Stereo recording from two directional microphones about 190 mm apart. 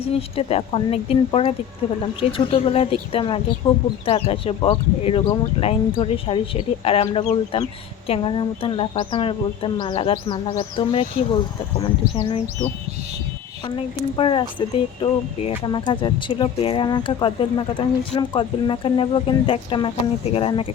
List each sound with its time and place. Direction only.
0.0 s speech: 30° left (ahead or behind)
13.7 s speech: 25° left (ahead or behind)